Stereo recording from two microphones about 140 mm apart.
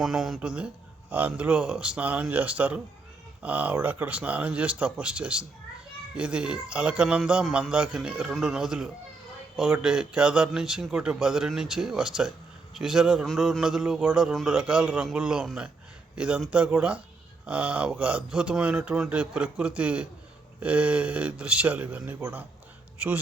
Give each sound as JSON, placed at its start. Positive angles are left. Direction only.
{"t": 0.0, "sound": "a man's voice", "side_deg": -5}